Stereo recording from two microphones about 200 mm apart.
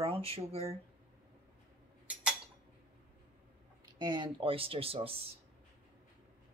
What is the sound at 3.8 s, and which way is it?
Speech, 20° right (ahead or behind).